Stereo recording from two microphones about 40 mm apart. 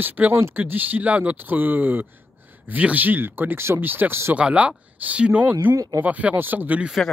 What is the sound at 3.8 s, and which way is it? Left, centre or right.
Speech, right.